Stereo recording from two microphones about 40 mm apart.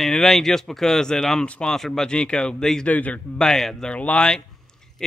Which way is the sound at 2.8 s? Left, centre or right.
Left.